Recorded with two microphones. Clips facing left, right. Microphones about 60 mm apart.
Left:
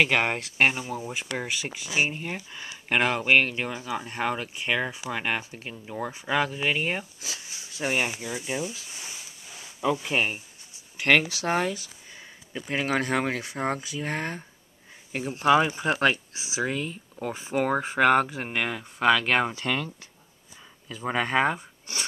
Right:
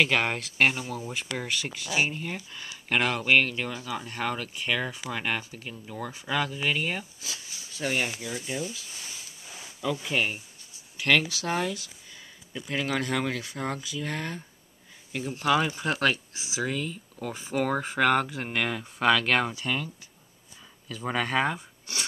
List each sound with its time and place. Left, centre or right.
0.0 s speech: left
8.9 s a sound: centre
9.5 s insect: centre
10.0 s speech: centre
19.6 s speech: left
20.9 s speech: centre